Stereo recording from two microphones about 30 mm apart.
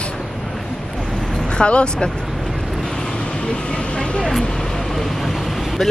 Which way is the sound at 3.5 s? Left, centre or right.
Left.